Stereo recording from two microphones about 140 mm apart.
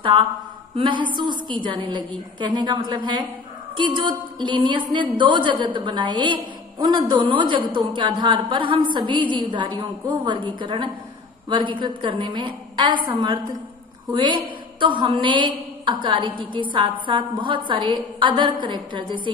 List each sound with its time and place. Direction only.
0.7 s a woman's voice: 35° right (ahead or behind)